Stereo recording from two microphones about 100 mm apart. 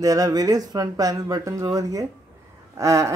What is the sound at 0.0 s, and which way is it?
Speech, 35° right (ahead or behind).